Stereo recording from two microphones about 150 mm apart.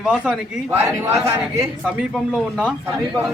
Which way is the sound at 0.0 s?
5° right (ahead or behind).